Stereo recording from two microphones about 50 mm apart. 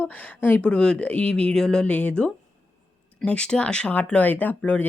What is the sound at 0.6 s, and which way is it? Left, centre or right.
Speech, centre.